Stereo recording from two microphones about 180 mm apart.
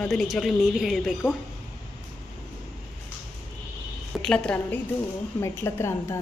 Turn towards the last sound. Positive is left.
turn(degrees=15)  # may be behind; listen again after turning